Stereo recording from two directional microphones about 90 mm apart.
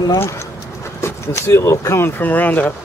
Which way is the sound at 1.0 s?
30° left (ahead or behind).